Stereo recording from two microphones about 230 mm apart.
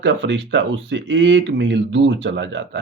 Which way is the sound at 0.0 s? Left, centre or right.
Right.